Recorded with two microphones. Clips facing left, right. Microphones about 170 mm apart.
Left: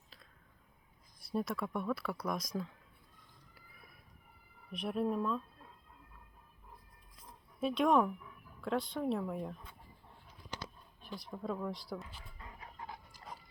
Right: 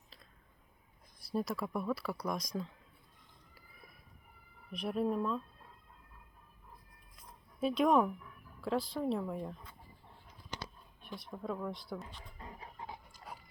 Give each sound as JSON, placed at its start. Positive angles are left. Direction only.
{"t": 1.2, "sound": "speech", "side_deg": 0}
{"t": 4.7, "sound": "speech", "side_deg": 0}
{"t": 7.6, "sound": "speech", "side_deg": 0}
{"t": 11.0, "sound": "speech", "side_deg": 0}
{"t": 12.4, "sound": "dog", "side_deg": -30}
{"t": 12.9, "sound": "dog", "side_deg": -10}